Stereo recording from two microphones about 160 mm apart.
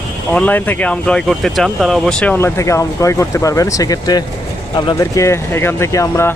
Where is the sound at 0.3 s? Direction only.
10° left (ahead or behind).